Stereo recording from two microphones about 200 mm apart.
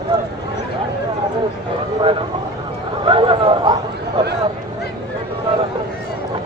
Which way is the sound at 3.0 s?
25° right (ahead or behind).